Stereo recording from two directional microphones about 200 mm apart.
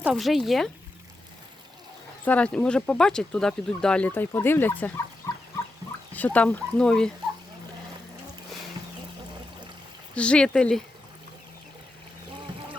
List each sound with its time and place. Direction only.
0.0 s speech: centre (ahead or behind)
2.2 s speech: 5° left (ahead or behind)
6.1 s speech: 5° left (ahead or behind)
10.2 s speech: 5° left (ahead or behind)